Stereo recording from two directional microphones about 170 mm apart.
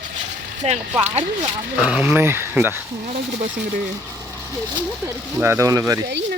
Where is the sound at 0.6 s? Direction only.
40° right (ahead or behind).